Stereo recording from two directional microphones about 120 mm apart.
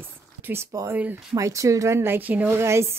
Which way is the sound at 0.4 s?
20° right (ahead or behind).